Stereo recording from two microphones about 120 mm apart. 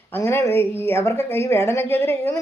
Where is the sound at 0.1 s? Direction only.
20° left (ahead or behind).